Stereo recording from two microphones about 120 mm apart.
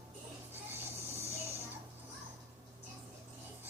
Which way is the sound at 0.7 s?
20° right (ahead or behind).